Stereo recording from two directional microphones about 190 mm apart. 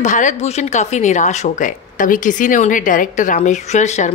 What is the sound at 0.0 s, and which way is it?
A woman's voice, 40° left (ahead or behind).